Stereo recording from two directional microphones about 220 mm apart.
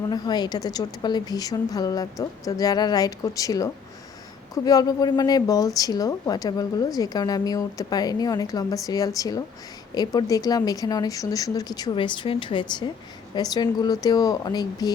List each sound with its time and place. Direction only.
0.1 s speech: 20° left (ahead or behind)